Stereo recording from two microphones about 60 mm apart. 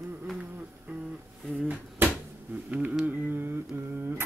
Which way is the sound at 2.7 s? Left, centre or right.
Right.